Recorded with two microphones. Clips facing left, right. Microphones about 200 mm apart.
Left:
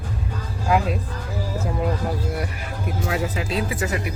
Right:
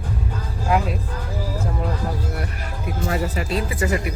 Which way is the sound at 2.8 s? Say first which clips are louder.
Right 1 dB; centre (ahead or behind).